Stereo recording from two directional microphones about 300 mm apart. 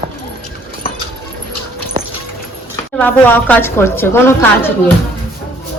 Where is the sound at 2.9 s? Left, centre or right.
Centre.